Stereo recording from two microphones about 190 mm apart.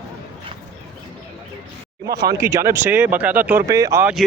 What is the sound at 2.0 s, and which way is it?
Speech, 55° right (ahead or behind).